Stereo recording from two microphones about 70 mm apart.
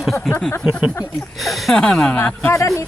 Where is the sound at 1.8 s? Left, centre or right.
Centre.